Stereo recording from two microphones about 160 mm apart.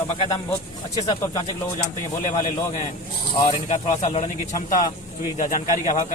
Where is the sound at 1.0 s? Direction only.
20° left (ahead or behind).